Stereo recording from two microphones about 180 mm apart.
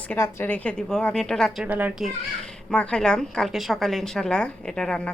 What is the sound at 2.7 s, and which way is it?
A woman's voice, 5° left (ahead or behind).